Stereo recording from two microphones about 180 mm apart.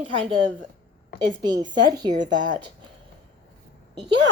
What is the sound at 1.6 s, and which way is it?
A woman's voice, 25° right (ahead or behind).